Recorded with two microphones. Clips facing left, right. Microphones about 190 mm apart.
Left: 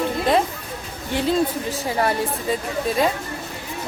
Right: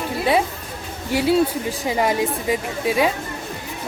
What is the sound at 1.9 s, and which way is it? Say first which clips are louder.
Speech: right 2 dB; 15° right (ahead or behind).